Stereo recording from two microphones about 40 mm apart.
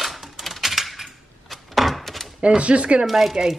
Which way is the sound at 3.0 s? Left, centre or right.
Centre.